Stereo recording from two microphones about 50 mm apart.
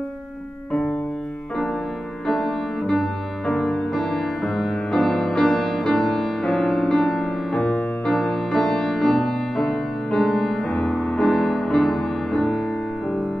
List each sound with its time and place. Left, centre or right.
2.2 s music: centre